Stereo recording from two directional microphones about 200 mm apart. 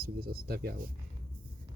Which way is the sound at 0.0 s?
50° right (ahead or behind).